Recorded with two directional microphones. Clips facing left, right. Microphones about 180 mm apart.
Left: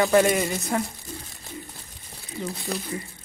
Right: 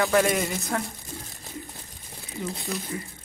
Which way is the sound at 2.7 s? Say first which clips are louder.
Left 3 dB; 35° left (ahead or behind).